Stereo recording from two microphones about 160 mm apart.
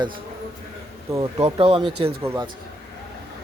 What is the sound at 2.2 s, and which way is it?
Speech, 15° right (ahead or behind).